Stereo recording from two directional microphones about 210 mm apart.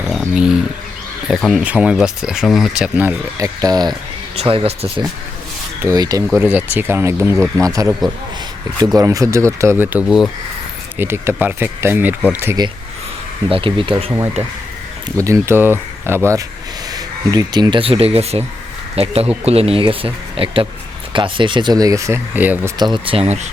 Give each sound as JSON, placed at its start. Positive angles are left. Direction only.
{"t": 0.0, "sound": "dog", "side_deg": 0}
{"t": 1.3, "sound": "speech", "side_deg": 0}
{"t": 9.0, "sound": "speech", "side_deg": -15}
{"t": 13.5, "sound": "speech", "side_deg": -25}
{"t": 15.2, "sound": "speech", "side_deg": -15}
{"t": 22.8, "sound": "speech", "side_deg": -25}